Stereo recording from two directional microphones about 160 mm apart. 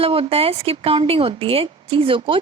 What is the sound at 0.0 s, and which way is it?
A woman's voice, 35° right (ahead or behind).